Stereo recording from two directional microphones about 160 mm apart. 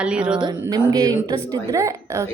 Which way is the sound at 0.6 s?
25° right (ahead or behind).